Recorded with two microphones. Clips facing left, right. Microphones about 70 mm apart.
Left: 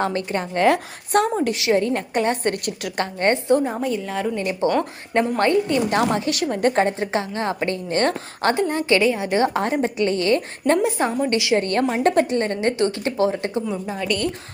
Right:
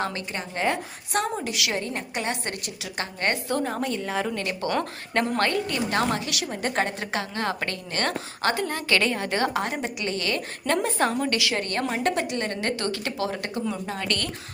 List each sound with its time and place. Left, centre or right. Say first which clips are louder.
0.0 s a woman's voice: left 7 dB; left
1.5 s speech: left 9 dB; left
1.8 s a woman's voice: left 9 dB; left
3.2 s speech: left 8 dB; left
3.6 s a woman's voice: left 4 dB; centre
4.4 s speech: left 6 dB; centre
6.1 s a woman's voice: left 6 dB; left
9.0 s a woman's voice: left 4 dB; centre
9.5 s a woman's voice: left 6 dB; left
10.8 s a woman's voice: left 3 dB; centre
11.3 s speech: left 7 dB; left
11.6 s a woman's voice: left 6 dB; left
12.5 s speech: left 7 dB; left
13.8 s a woman's voice: left 6 dB; centre